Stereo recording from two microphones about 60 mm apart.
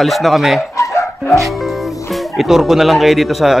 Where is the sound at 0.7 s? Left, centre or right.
Left.